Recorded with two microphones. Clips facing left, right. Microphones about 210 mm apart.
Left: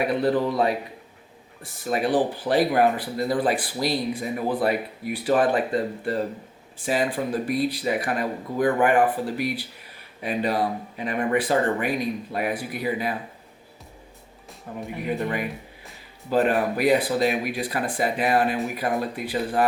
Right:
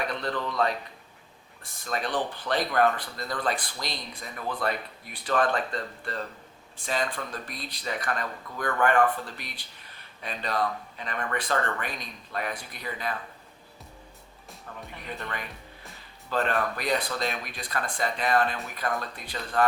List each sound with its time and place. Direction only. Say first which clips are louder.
0.0 s speech: left 9 dB; 5° left (ahead or behind)
14.7 s speech: left 11 dB; 20° left (ahead or behind)